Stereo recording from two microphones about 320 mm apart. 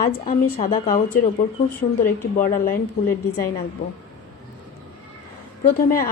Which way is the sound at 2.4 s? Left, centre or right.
Left.